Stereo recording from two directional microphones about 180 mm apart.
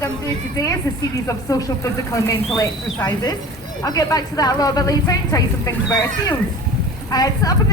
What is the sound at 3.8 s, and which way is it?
Speech, 20° left (ahead or behind).